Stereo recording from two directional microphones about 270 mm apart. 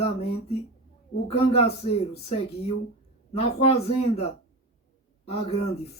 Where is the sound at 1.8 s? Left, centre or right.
Left.